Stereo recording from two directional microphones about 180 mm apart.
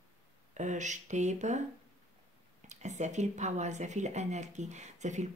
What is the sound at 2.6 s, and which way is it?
Speech, 40° right (ahead or behind).